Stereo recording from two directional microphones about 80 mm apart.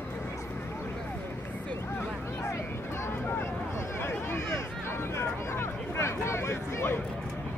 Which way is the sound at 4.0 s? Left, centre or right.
Left.